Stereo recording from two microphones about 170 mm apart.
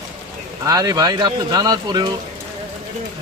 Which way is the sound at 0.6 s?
20° right (ahead or behind).